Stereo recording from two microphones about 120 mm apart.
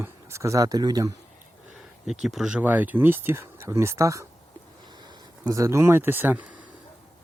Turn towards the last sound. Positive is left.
turn(degrees=-10)  # may be behind; listen again after turning